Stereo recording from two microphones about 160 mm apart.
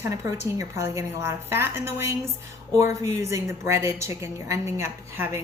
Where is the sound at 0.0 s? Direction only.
20° right (ahead or behind).